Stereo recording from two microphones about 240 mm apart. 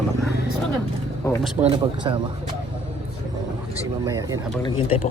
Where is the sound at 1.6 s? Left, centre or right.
Right.